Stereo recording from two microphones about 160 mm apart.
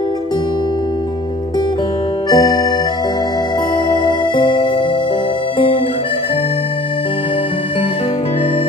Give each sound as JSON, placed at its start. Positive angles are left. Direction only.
{"t": 2.2, "sound": "music", "side_deg": 25}
{"t": 3.9, "sound": "music", "side_deg": 30}